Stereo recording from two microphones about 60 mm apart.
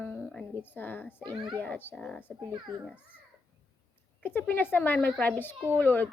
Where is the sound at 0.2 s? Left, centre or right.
Centre.